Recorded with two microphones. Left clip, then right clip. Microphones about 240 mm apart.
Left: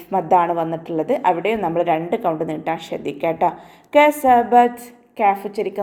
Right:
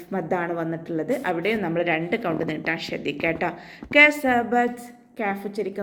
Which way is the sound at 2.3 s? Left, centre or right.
Centre.